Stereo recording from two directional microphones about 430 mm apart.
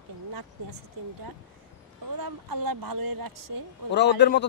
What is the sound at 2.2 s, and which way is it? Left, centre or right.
A woman's voice, right.